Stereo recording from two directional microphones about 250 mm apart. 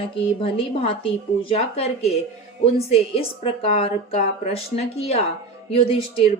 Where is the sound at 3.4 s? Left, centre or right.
Left.